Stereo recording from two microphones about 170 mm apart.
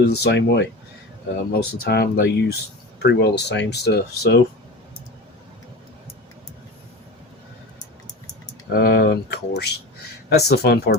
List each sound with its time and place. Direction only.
0.0 s speech: 75° left (ahead or behind); by 0.7 s 90° left
1.5 s speech: 70° left (ahead or behind)
8.7 s speech: 65° left (ahead or behind)